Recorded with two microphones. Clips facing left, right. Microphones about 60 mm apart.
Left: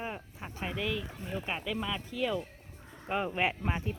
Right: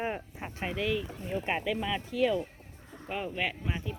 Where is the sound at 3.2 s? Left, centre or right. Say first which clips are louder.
Left 1 dB; left.